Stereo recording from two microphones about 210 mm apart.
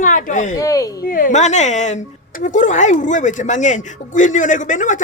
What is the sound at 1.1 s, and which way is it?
Speech, 40° left (ahead or behind).